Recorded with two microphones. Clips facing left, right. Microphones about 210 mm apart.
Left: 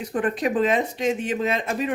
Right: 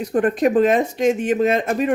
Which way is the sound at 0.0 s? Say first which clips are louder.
Right 6 dB; 45° right (ahead or behind).